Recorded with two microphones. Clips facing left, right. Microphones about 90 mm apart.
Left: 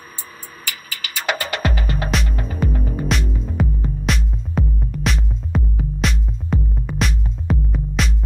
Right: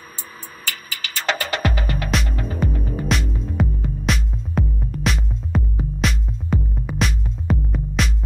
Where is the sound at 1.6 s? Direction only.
25° left (ahead or behind).